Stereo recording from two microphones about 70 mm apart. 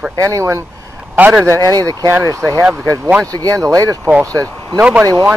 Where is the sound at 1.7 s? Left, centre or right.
Right.